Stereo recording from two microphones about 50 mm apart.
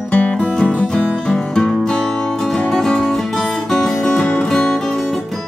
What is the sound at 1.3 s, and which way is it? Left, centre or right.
Music, centre.